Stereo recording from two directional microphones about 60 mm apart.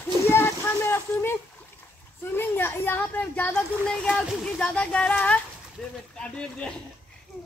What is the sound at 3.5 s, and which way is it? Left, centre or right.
Speech, centre.